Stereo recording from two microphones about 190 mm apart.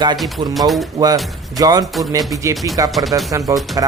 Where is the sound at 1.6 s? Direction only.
20° right (ahead or behind).